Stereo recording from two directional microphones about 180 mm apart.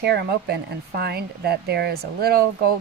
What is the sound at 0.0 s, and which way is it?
Speech, 65° right (ahead or behind).